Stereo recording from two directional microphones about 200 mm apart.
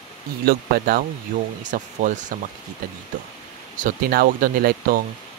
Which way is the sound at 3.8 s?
45° right (ahead or behind).